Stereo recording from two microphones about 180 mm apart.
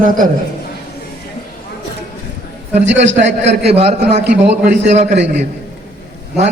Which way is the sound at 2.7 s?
40° right (ahead or behind).